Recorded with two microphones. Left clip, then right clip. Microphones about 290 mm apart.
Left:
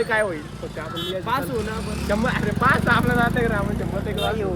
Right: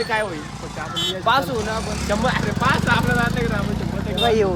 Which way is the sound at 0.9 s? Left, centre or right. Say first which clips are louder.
Right 6 dB; centre.